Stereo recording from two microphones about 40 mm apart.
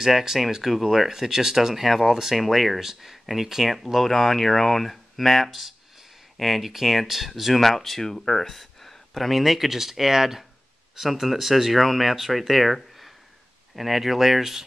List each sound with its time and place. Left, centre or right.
0.0 s speech: centre